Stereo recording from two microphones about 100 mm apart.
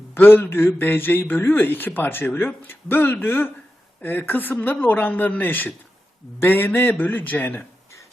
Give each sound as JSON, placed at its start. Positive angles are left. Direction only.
{"t": 0.1, "sound": "a man's voice", "side_deg": 20}